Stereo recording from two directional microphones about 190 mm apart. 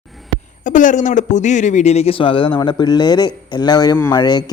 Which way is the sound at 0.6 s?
40° left (ahead or behind).